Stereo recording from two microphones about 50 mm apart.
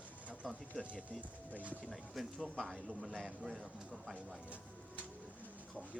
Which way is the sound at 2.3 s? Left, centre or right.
Centre.